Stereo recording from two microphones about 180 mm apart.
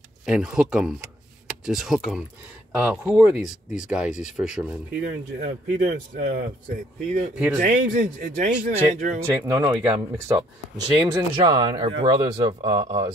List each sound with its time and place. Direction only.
0.2 s speech: 5° right (ahead or behind)
5.0 s speech: 70° right (ahead or behind)
6.1 s a man's voice: 45° right (ahead or behind)
7.3 s speech: 5° right (ahead or behind)
7.6 s a man's voice: 45° right (ahead or behind)
9.3 s speech: 20° right (ahead or behind)